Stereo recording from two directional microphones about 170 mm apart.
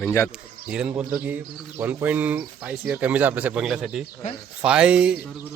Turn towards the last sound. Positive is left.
turn(degrees=-5)  # may be behind; listen again after turning